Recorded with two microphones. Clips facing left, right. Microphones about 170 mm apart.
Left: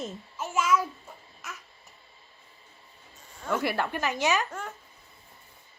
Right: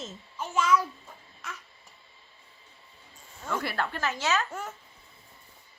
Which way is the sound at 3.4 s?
10° left (ahead or behind).